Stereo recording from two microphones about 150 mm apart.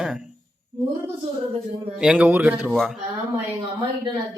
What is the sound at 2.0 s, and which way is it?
Speech, 5° right (ahead or behind).